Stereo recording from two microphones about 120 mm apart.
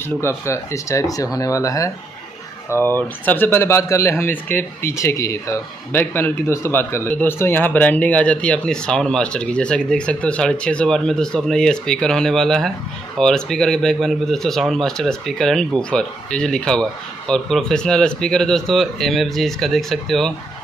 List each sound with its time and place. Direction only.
0.2 s speech: 20° left (ahead or behind)
3.0 s speech: 15° left (ahead or behind)